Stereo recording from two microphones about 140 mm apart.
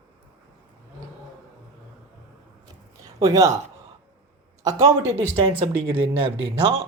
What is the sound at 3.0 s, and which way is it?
Speech, 25° right (ahead or behind).